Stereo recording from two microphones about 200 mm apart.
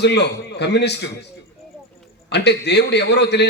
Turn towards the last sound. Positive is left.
turn(degrees=60)  # may be behind; listen again after turning